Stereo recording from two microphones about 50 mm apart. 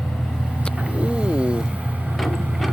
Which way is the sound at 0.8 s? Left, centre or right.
Right.